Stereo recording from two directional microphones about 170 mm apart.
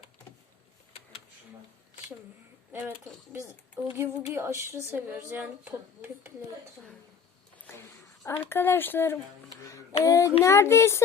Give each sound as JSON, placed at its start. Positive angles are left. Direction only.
{"t": 3.8, "sound": "speech", "side_deg": -15}
{"t": 8.2, "sound": "speech", "side_deg": 15}